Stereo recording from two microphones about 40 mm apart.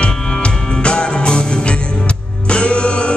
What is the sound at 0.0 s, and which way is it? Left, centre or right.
Music, left.